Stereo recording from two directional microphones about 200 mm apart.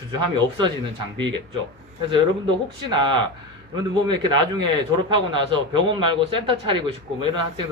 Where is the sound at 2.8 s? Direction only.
25° right (ahead or behind).